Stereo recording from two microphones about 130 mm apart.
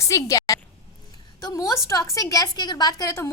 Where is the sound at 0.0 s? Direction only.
25° left (ahead or behind).